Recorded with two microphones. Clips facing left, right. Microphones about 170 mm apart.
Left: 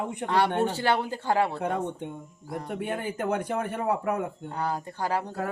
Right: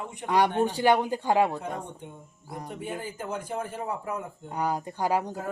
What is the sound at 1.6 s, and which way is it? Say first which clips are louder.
Speech: left 6 dB; 65° left (ahead or behind).